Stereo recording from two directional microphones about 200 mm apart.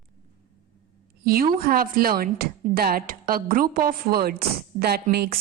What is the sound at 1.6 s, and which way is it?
A woman's voice, 45° right (ahead or behind).